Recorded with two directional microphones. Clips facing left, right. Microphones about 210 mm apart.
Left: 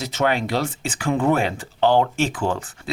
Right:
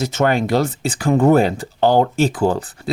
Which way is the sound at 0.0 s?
45° right (ahead or behind).